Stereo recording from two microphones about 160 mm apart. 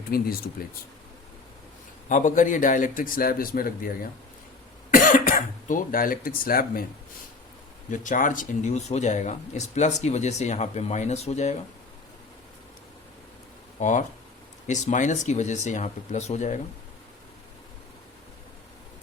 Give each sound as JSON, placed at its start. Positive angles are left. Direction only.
{"t": 0.1, "sound": "speech", "side_deg": 70}
{"t": 2.0, "sound": "a man's voice", "side_deg": 50}
{"t": 7.9, "sound": "speech", "side_deg": 55}
{"t": 13.7, "sound": "speech", "side_deg": 50}